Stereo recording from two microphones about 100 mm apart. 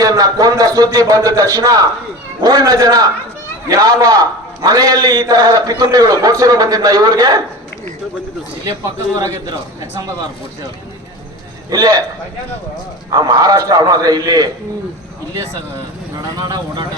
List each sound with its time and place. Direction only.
0.0 s a man's voice: 35° right (ahead or behind)
11.7 s a man's voice: 40° right (ahead or behind)
13.1 s a man's voice: 40° right (ahead or behind)
16.4 s a man's voice: 40° right (ahead or behind)